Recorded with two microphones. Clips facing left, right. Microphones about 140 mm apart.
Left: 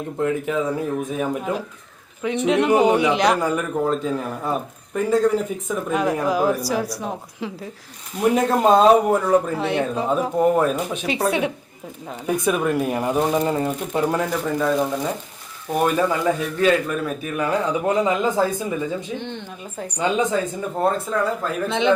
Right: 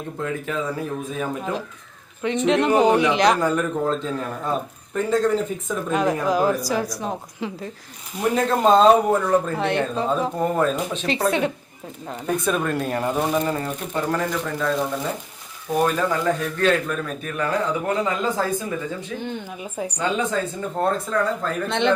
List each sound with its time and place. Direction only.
0.2 s speech: 15° left (ahead or behind)
19.2 s speech: 5° right (ahead or behind)
20.0 s speech: 15° left (ahead or behind)
20.8 s speech: 5° left (ahead or behind)